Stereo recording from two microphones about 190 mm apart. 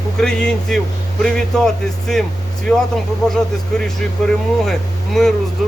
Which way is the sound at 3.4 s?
5° left (ahead or behind).